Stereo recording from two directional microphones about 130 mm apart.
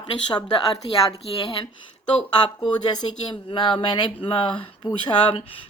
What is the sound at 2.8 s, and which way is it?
Speech, 35° left (ahead or behind).